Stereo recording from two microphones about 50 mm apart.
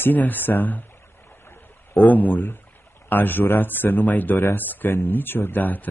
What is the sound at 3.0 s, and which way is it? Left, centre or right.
Speech, left.